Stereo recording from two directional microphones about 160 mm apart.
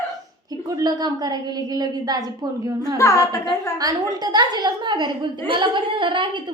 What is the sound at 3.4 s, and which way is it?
A woman's voice, 25° right (ahead or behind).